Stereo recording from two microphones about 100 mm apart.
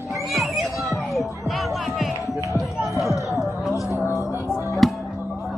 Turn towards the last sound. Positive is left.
turn(degrees=0)  # may be behind; listen again after turning